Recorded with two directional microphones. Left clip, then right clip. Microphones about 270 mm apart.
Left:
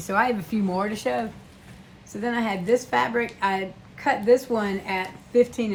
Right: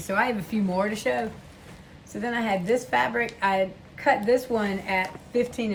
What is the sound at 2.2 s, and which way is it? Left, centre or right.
A woman's voice, centre.